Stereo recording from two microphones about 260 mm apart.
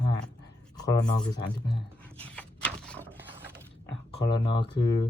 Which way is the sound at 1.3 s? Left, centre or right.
Centre.